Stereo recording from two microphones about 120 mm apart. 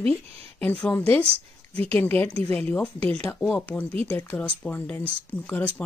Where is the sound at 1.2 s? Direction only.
55° right (ahead or behind).